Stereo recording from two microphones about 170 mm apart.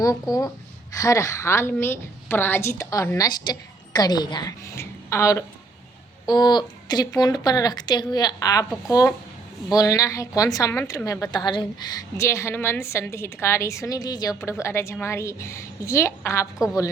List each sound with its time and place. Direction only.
0.0 s a woman's voice: 20° left (ahead or behind)